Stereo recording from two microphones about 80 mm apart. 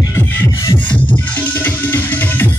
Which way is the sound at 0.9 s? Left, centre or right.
Left.